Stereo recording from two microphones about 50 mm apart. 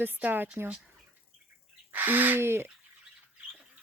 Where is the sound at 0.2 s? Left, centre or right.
Right.